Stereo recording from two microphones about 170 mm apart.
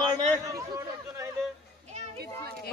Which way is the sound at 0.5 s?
20° right (ahead or behind).